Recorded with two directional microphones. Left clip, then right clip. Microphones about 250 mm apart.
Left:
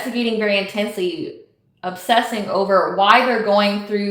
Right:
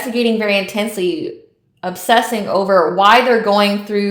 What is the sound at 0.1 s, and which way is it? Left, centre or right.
A woman's voice, right.